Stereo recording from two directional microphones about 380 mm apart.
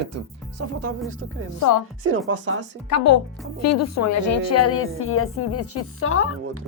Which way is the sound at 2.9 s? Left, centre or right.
Left.